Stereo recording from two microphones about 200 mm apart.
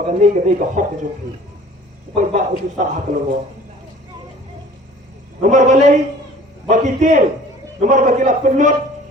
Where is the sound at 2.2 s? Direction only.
40° right (ahead or behind).